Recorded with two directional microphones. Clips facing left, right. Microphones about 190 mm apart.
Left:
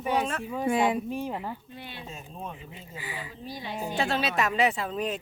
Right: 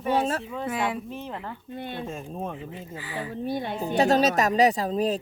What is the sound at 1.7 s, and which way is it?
Speech, 50° right (ahead or behind).